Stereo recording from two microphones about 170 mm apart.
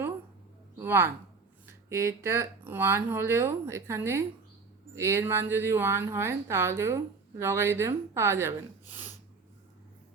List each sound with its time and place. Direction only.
0.8 s a woman's voice: 15° right (ahead or behind)